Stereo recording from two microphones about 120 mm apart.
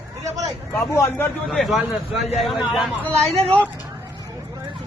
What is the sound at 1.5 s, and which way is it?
Speech, centre (ahead or behind).